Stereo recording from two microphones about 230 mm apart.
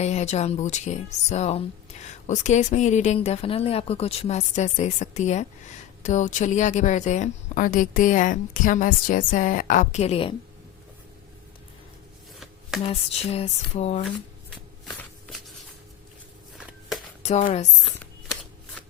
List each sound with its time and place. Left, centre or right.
0.0 s a woman's voice: left
12.9 s speech: left
17.2 s speech: left